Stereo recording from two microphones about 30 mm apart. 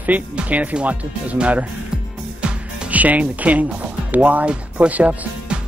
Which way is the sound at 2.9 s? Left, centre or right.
Right.